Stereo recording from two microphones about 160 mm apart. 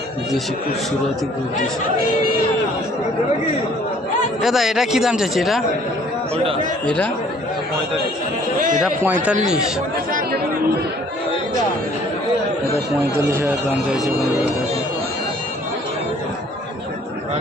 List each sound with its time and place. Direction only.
4.4 s a man's voice: centre (ahead or behind)
6.8 s speech: 5° left (ahead or behind)
8.8 s speech: 10° right (ahead or behind)
10.1 s chatter: 60° right (ahead or behind)
13.3 s speech: 15° right (ahead or behind)